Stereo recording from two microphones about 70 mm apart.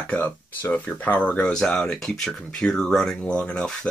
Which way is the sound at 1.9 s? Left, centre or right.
Centre.